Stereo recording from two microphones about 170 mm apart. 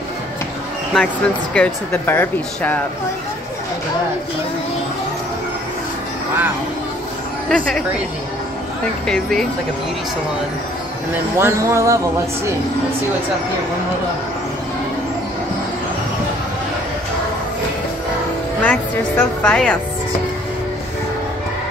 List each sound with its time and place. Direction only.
0.9 s speech: 5° left (ahead or behind)
7.4 s speech: 5° left (ahead or behind)
9.0 s speech: 5° left (ahead or behind)
11.3 s speech: 15° right (ahead or behind)
18.6 s a woman's voice: 10° left (ahead or behind)